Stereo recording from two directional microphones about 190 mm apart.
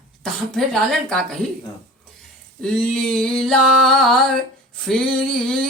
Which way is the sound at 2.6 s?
Centre (ahead or behind).